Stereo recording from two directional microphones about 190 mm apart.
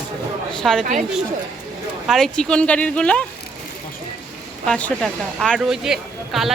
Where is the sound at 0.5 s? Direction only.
Centre (ahead or behind).